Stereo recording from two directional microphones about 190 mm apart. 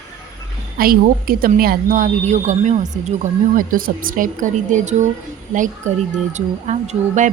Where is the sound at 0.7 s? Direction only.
50° right (ahead or behind).